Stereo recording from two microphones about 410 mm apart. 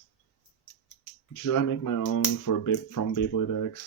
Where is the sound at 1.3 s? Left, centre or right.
Left.